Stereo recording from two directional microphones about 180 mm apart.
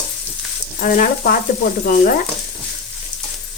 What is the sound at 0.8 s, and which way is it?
Speech, 50° left (ahead or behind).